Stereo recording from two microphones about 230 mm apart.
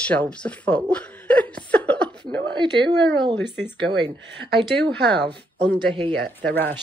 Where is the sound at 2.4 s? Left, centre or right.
Centre.